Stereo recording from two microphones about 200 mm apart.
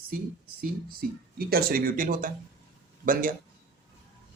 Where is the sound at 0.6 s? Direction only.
45° right (ahead or behind).